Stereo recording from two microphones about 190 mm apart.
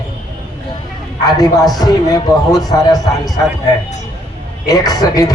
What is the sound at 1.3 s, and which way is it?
A man's voice, 20° left (ahead or behind).